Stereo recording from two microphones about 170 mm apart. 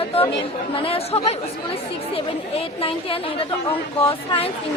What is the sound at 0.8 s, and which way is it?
A woman's voice, 35° left (ahead or behind).